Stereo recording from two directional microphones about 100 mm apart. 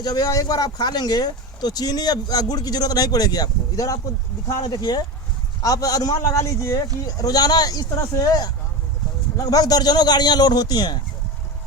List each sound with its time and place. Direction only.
0.0 s speech: 40° left (ahead or behind)